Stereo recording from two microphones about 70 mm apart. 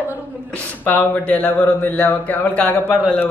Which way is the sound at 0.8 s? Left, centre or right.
Left.